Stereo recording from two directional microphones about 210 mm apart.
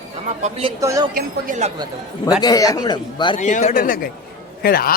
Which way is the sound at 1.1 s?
35° right (ahead or behind).